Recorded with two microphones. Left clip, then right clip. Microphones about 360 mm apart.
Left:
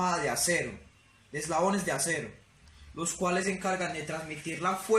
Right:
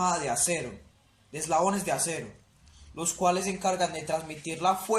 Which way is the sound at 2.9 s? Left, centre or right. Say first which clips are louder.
Right 4 dB; centre.